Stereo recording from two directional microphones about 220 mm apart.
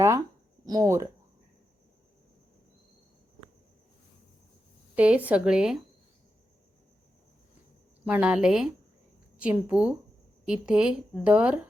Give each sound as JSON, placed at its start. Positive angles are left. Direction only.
{"t": 0.6, "sound": "speech", "side_deg": -15}
{"t": 4.9, "sound": "a woman's voice", "side_deg": -5}
{"t": 8.0, "sound": "a woman's voice", "side_deg": -5}